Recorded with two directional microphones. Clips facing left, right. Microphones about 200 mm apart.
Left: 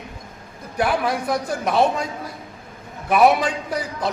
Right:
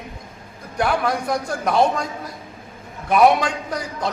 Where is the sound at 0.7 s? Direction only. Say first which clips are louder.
Even; 5° left (ahead or behind).